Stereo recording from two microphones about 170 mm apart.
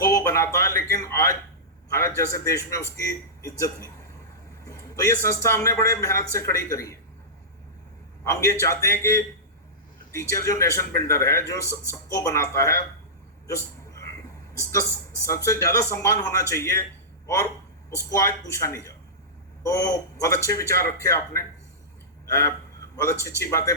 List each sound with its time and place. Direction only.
0.0 s a man's voice: 15° left (ahead or behind)
8.2 s a man's voice: 20° left (ahead or behind)
14.6 s a man's voice: 15° left (ahead or behind)
17.9 s a man's voice: 20° left (ahead or behind)